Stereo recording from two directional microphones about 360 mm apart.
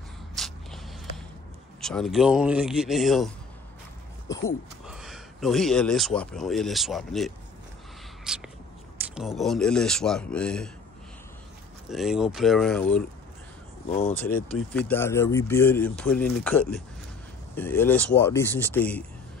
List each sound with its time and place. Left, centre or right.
0.4 s a sound: centre
1.8 s speech: centre
4.5 s speech: centre
8.2 s a sound: centre
8.9 s speech: centre
11.9 s speech: centre
13.8 s speech: centre
14.1 s speech: centre